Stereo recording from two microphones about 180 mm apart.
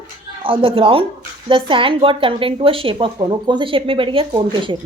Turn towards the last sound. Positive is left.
turn(degrees=-25)  # may be behind; listen again after turning